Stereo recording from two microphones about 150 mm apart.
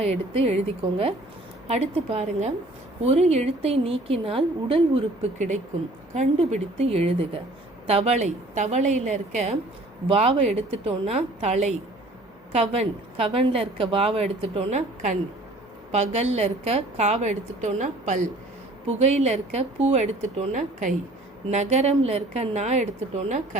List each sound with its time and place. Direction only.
0.0 s a woman's voice: 45° right (ahead or behind)
6.1 s a woman's voice: 45° right (ahead or behind)
20.5 s a woman's voice: 60° right (ahead or behind)